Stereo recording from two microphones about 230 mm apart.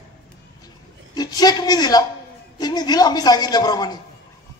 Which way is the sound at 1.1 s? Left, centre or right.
Centre.